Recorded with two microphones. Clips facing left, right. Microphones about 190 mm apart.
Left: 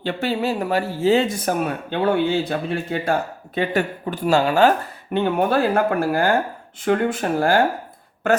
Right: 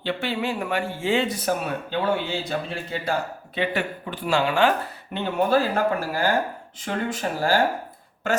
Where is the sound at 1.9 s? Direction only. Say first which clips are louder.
Left 6 dB; 55° left (ahead or behind).